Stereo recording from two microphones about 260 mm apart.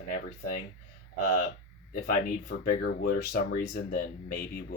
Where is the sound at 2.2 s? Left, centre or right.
Left.